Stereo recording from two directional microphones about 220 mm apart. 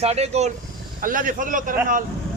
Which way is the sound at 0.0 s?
30° right (ahead or behind).